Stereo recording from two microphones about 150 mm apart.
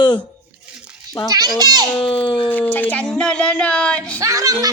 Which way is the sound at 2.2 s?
35° left (ahead or behind).